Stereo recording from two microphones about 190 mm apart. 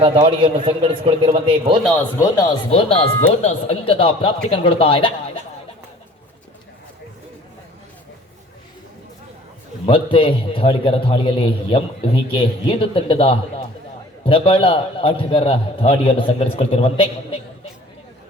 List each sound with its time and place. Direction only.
0.0 s a man's voice: 30° right (ahead or behind)
2.1 s speech: 15° left (ahead or behind)
2.6 s a man's voice: 30° left (ahead or behind)
9.8 s a man's voice: 30° left (ahead or behind)